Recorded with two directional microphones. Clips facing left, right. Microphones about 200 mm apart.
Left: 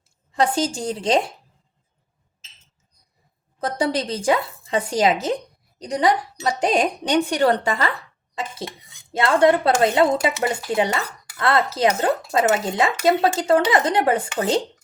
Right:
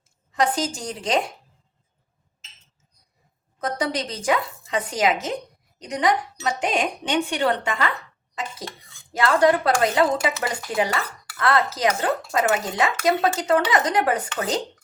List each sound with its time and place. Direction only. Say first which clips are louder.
0.3 s speech: left 2 dB; 30° left (ahead or behind)
3.6 s speech: left 3 dB; 30° left (ahead or behind)
8.4 s speech: left 2 dB; 25° left (ahead or behind)